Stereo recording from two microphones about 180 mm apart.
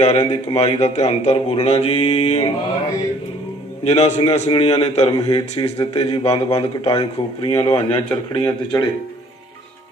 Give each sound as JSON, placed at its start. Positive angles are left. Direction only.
{"t": 0.0, "sound": "speech", "side_deg": 35}
{"t": 3.8, "sound": "a man's voice", "side_deg": 35}